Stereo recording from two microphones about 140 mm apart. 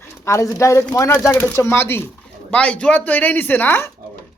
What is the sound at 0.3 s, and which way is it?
Speech, 20° left (ahead or behind).